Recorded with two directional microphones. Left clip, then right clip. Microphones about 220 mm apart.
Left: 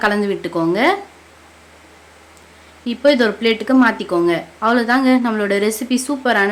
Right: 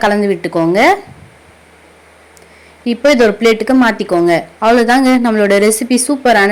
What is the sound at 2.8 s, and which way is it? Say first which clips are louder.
Speech: right 5 dB; 20° right (ahead or behind).